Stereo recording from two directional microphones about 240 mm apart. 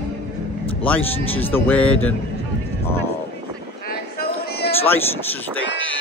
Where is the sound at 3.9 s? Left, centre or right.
Left.